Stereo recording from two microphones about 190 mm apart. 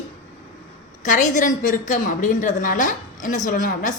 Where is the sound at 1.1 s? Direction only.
40° left (ahead or behind).